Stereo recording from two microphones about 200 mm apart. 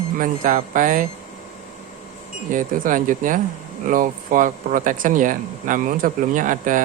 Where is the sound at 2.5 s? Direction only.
40° right (ahead or behind).